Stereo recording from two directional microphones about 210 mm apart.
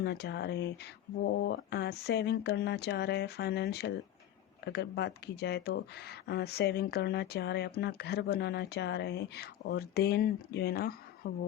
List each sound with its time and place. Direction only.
0.0 s speech: 50° left (ahead or behind)